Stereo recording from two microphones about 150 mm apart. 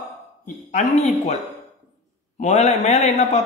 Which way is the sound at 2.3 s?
50° left (ahead or behind).